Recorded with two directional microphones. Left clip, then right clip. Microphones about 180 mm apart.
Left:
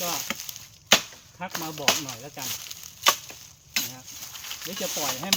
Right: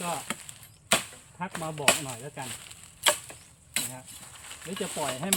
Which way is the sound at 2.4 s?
45° left (ahead or behind).